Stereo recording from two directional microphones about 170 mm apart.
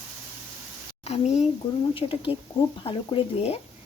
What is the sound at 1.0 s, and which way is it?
Speech, 40° left (ahead or behind).